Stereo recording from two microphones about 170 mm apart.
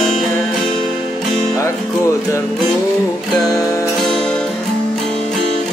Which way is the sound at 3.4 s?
20° left (ahead or behind).